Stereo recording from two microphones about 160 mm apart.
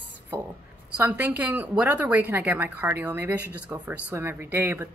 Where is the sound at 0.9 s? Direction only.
10° right (ahead or behind).